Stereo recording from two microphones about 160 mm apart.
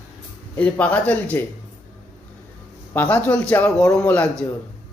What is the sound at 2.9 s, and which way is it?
Speech, 10° left (ahead or behind).